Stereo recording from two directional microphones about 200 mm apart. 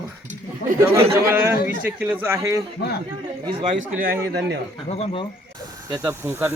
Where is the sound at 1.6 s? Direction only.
10° right (ahead or behind).